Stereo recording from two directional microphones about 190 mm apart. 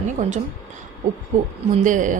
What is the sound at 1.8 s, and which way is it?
Speech, 40° right (ahead or behind).